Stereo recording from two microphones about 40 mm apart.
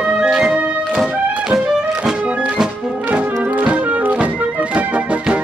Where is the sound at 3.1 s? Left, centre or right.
Right.